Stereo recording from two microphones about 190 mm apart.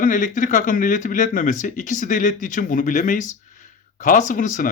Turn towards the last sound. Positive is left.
turn(degrees=45)  # may be behind; listen again after turning